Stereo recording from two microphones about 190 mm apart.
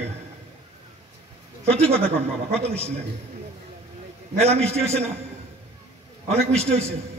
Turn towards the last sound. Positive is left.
turn(degrees=-35)  # may be behind; listen again after turning